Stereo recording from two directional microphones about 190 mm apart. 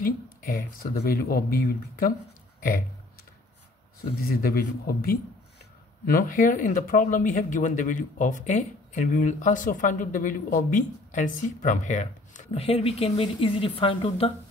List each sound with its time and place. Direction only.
0.0 s speech: 45° left (ahead or behind)
4.2 s speech: 50° left (ahead or behind); by 14.3 s 30° left (ahead or behind)